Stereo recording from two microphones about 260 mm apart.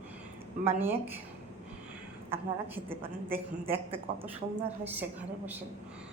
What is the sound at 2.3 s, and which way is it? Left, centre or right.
A woman's voice, centre.